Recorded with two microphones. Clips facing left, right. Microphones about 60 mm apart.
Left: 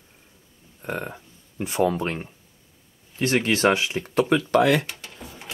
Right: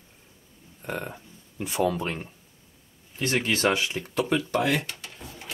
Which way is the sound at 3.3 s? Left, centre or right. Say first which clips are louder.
Left 4 dB; left.